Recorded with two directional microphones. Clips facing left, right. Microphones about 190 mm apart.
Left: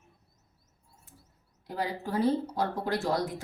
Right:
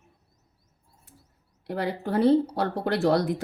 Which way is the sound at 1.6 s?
65° right (ahead or behind).